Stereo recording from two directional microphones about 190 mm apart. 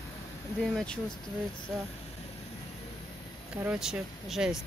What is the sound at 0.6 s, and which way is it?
Speech, centre (ahead or behind).